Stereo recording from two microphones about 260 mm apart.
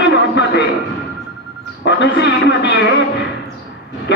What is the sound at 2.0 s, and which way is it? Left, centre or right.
Speech, left.